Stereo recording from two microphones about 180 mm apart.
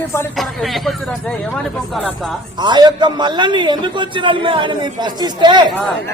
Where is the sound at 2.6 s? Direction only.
25° right (ahead or behind).